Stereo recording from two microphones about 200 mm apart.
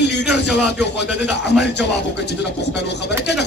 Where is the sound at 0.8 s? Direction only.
60° left (ahead or behind).